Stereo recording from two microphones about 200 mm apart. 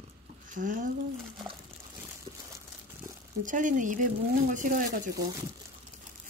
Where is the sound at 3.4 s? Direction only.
40° right (ahead or behind).